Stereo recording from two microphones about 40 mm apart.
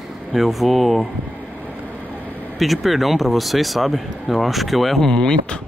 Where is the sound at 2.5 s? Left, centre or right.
Centre.